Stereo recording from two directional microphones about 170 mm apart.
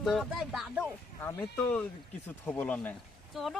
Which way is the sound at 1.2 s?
15° left (ahead or behind).